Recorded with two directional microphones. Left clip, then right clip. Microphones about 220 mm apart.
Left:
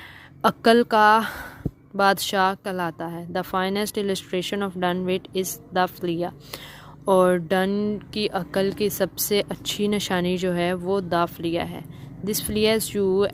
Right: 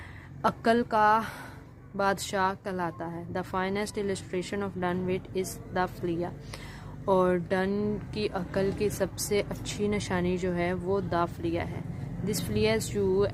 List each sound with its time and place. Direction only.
0.4 s speech: 40° left (ahead or behind)